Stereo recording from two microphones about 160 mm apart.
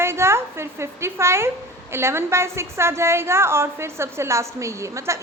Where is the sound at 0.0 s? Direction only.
15° right (ahead or behind).